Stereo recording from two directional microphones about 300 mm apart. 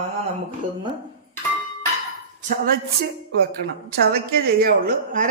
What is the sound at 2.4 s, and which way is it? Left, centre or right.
Speech, right.